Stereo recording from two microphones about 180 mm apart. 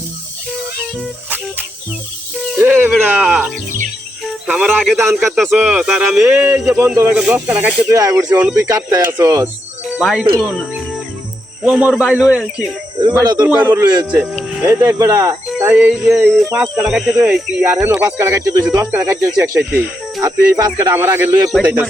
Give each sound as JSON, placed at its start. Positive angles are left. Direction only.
{"t": 2.6, "sound": "a sound", "side_deg": -10}
{"t": 2.9, "sound": "speech", "side_deg": -5}
{"t": 9.9, "sound": "speech", "side_deg": 0}
{"t": 11.6, "sound": "speech", "side_deg": -5}
{"t": 13.0, "sound": "speech", "side_deg": -25}
{"t": 21.5, "sound": "speech", "side_deg": -5}